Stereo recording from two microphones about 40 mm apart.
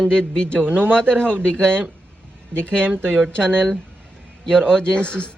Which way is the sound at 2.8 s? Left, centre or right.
Right.